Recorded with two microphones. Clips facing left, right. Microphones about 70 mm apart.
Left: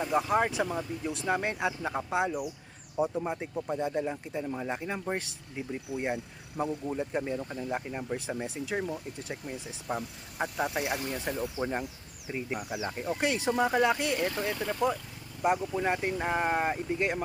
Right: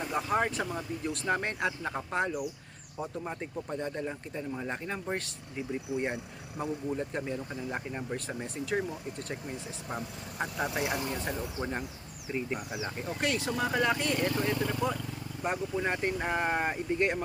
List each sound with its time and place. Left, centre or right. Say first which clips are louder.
0.0 s speech: left 3 dB; centre
13.1 s speech: left 3 dB; centre